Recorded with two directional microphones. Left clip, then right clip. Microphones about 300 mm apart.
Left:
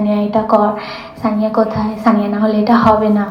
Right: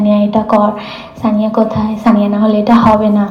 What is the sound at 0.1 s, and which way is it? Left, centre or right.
A woman's voice, centre.